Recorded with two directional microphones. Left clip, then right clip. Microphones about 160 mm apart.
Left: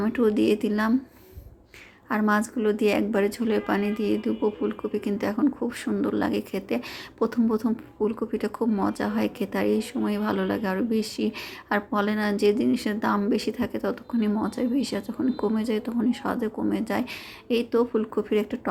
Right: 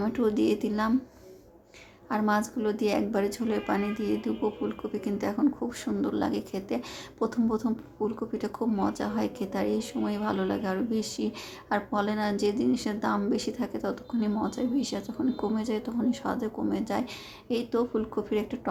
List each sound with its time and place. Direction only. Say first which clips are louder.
0.0 s a woman's voice: left 4 dB; 20° left (ahead or behind)
2.0 s a woman's voice: left 3 dB; 25° left (ahead or behind)